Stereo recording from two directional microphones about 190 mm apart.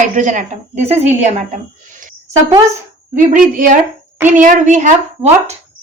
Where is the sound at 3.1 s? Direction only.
45° right (ahead or behind).